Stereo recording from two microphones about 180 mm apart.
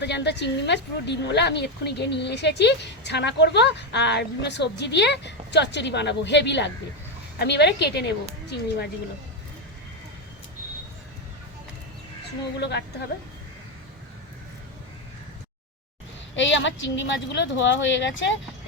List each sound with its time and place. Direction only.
0.0 s a woman's voice: 70° left (ahead or behind)
12.5 s a woman's voice: 70° left (ahead or behind)
16.3 s a woman's voice: 90° left